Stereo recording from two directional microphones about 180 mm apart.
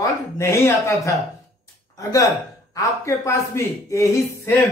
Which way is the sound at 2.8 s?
15° left (ahead or behind).